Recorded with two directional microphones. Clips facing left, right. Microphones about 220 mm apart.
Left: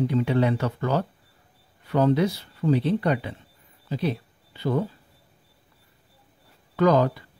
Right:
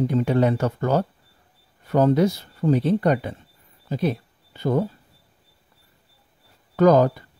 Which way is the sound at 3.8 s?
45° right (ahead or behind).